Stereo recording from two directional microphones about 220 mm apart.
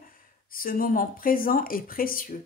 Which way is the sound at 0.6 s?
40° left (ahead or behind).